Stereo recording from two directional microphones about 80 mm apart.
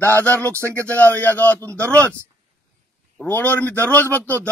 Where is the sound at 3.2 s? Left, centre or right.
Left.